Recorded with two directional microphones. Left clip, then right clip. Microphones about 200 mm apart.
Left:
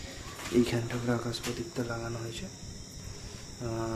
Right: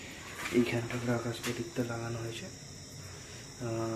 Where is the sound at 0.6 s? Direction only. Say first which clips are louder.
Left 3 dB; 10° left (ahead or behind).